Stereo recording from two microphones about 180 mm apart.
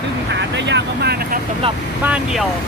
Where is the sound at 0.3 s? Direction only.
80° right; by 1.4 s 60° right (ahead or behind).